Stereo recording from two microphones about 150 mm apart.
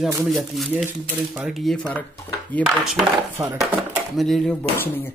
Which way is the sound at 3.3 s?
20° right (ahead or behind).